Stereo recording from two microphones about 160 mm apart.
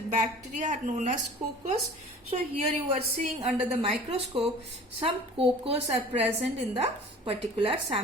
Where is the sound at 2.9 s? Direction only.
40° right (ahead or behind).